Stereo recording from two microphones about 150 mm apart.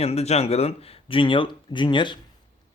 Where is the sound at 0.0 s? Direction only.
45° left (ahead or behind).